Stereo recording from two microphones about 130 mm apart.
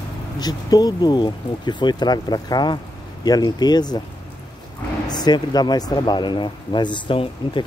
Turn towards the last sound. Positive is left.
turn(degrees=40)  # may be behind; listen again after turning